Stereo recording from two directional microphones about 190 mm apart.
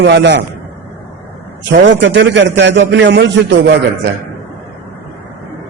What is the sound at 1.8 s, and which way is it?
A man's voice, 70° right (ahead or behind).